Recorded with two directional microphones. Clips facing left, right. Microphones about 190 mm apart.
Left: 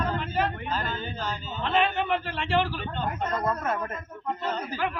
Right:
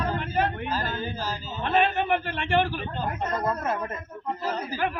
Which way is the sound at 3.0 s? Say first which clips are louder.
Even; 5° right (ahead or behind).